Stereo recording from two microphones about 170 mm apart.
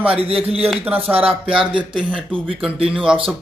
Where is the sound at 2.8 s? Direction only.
5° right (ahead or behind).